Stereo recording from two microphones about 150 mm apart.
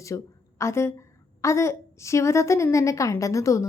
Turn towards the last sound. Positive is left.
turn(degrees=20)  # may be behind; listen again after turning